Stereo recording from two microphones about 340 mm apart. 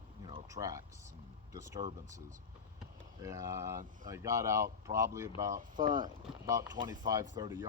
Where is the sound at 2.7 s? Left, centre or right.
Centre.